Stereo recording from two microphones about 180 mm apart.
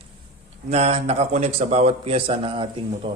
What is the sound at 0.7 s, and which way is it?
A man's voice, 35° right (ahead or behind).